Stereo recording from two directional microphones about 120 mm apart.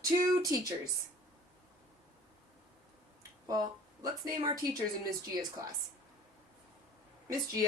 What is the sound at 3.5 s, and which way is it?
Speech, 30° right (ahead or behind).